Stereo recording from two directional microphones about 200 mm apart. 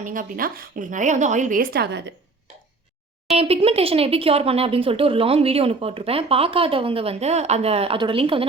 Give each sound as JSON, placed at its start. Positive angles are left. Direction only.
{"t": 0.0, "sound": "a woman's voice", "side_deg": -40}
{"t": 3.2, "sound": "speech", "side_deg": -30}